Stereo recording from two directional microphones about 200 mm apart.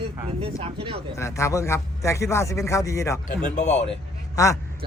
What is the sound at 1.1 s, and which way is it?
Speech, 15° left (ahead or behind).